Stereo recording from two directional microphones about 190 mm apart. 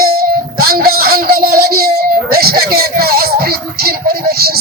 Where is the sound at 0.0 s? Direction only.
55° right (ahead or behind).